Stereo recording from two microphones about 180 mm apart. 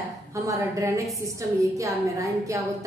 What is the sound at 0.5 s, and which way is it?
A woman's voice, 15° right (ahead or behind).